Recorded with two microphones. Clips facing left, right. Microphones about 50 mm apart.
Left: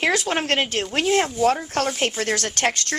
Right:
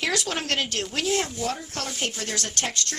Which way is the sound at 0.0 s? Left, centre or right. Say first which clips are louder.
Left 6 dB; left.